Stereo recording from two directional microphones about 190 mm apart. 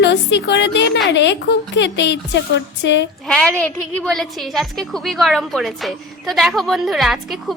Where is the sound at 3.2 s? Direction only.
5° left (ahead or behind).